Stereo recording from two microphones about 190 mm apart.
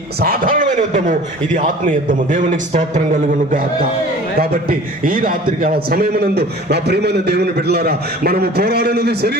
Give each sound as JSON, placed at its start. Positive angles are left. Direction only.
{"t": 0.2, "sound": "a man's voice", "side_deg": -50}